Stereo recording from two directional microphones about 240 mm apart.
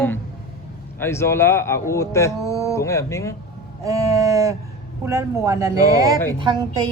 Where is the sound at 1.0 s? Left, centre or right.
Centre.